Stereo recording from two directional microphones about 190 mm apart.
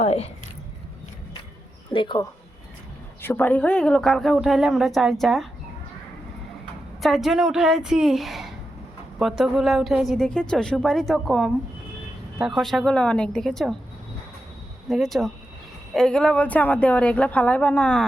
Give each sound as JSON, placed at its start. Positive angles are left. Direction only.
{"t": 0.0, "sound": "speech", "side_deg": 30}
{"t": 1.9, "sound": "speech", "side_deg": 25}
{"t": 3.2, "sound": "a woman's voice", "side_deg": 10}
{"t": 7.0, "sound": "a woman's voice", "side_deg": 0}
{"t": 14.8, "sound": "a woman's voice", "side_deg": 0}